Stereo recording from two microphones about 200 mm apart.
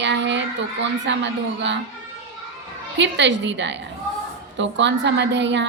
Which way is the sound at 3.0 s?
60° right (ahead or behind).